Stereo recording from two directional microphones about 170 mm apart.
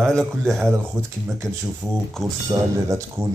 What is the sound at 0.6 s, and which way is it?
Speech, 10° right (ahead or behind).